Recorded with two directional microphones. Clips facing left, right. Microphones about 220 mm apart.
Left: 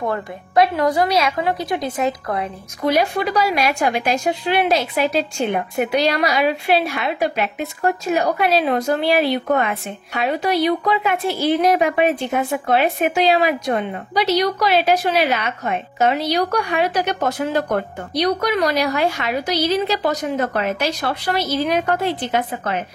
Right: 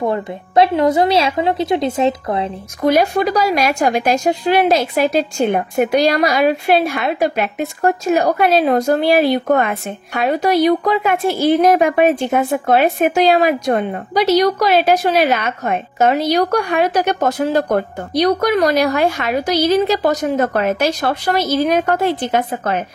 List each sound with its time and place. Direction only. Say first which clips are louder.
0.0 s a woman's voice: right 4 dB; 25° right (ahead or behind)
2.8 s a woman's voice: right 4 dB; 45° right (ahead or behind)